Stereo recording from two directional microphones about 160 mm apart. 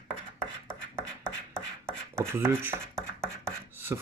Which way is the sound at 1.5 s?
5° left (ahead or behind).